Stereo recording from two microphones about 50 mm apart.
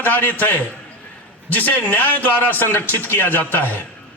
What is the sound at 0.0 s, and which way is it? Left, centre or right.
A man's voice, left.